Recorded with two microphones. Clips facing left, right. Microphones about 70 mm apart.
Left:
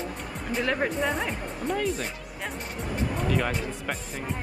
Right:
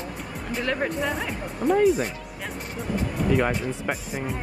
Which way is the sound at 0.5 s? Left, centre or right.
Centre.